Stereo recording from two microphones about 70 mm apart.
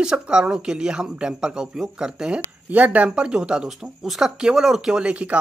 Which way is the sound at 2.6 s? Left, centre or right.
Right.